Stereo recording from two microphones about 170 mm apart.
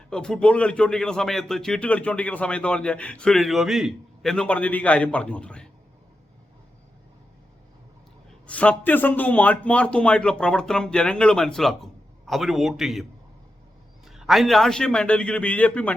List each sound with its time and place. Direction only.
0.1 s speech: 5° left (ahead or behind)
8.4 s a man's voice: 10° left (ahead or behind)
14.1 s a man's voice: centre (ahead or behind)